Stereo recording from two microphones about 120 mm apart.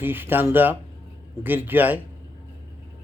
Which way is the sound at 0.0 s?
15° right (ahead or behind).